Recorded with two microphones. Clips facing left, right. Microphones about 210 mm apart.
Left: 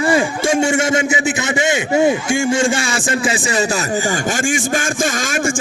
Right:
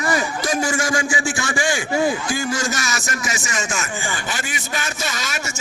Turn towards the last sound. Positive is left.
turn(degrees=50)  # may be behind; listen again after turning